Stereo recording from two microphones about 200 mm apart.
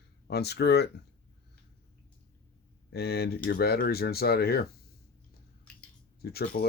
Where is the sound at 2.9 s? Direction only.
50° left (ahead or behind).